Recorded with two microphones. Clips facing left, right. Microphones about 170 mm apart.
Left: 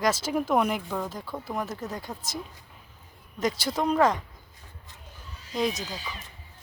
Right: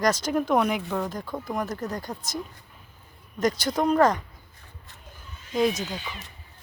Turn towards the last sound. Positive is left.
turn(degrees=0)  # may be behind; listen again after turning